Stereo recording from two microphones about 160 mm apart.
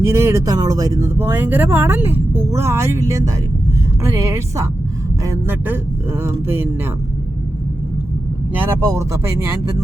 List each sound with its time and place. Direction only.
0.0 s speech: 15° right (ahead or behind)
8.8 s speech: 15° right (ahead or behind)